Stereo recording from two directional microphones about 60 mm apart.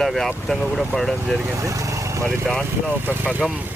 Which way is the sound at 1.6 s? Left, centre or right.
Right.